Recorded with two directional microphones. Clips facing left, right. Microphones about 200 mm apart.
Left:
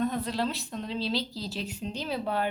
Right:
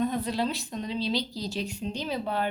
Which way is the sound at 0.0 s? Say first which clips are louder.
Right 1 dB; centre (ahead or behind).